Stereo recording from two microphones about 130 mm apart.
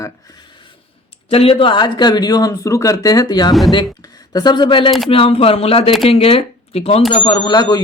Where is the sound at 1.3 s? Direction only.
45° left (ahead or behind).